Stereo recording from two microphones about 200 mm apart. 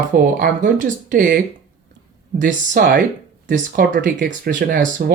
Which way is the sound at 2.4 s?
40° right (ahead or behind).